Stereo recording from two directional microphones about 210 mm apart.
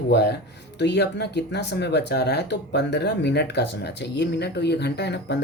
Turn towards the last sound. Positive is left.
turn(degrees=55)  # may be behind; listen again after turning